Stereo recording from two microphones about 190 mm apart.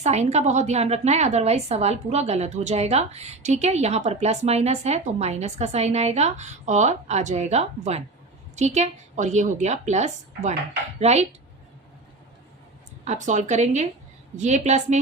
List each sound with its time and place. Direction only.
0.0 s a woman's voice: 35° right (ahead or behind)
13.1 s a woman's voice: 40° right (ahead or behind)